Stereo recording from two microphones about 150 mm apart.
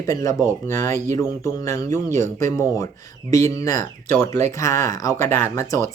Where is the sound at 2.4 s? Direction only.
20° left (ahead or behind).